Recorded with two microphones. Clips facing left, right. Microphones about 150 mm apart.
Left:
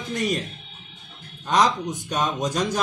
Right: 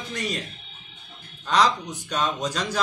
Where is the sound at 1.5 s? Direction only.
20° left (ahead or behind).